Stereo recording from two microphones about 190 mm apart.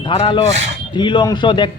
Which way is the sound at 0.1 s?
25° left (ahead or behind).